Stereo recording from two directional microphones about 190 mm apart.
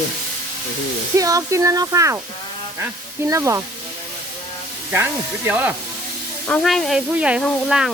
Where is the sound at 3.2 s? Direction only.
15° right (ahead or behind).